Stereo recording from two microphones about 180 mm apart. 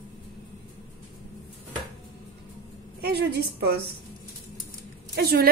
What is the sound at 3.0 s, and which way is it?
Speech, 60° right (ahead or behind).